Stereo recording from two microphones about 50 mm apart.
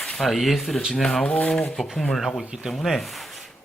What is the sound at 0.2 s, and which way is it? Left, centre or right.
Speech, centre.